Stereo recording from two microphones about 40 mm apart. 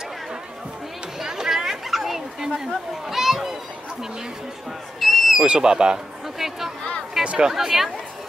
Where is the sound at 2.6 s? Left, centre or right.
Centre.